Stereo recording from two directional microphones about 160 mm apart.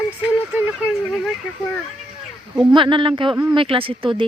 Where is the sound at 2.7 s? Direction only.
30° right (ahead or behind).